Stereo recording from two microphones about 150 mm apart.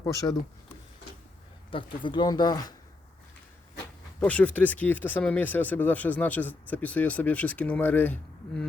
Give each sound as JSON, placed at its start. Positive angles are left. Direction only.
{"t": 0.0, "sound": "speech", "side_deg": 20}
{"t": 1.7, "sound": "speech", "side_deg": 30}
{"t": 4.2, "sound": "speech", "side_deg": 10}